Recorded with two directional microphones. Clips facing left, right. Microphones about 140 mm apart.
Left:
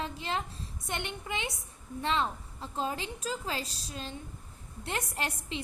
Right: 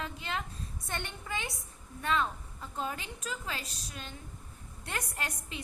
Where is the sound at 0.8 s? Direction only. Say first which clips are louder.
Left 3 dB; 20° left (ahead or behind).